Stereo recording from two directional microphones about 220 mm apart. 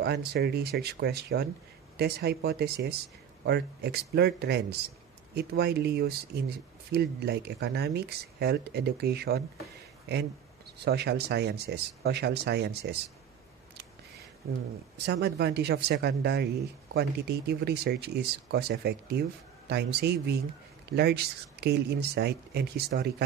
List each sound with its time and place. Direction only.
0.0 s speech: 50° right (ahead or behind)
10.8 s speech: 50° right (ahead or behind)
15.0 s speech: 50° right (ahead or behind)